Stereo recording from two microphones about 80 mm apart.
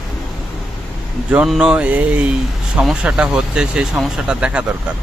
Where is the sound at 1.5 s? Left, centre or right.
Centre.